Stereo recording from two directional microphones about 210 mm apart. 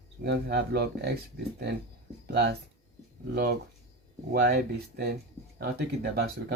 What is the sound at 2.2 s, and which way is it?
Speech, 50° right (ahead or behind).